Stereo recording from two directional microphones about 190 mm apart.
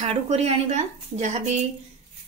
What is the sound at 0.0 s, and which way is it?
A woman's voice, 35° right (ahead or behind).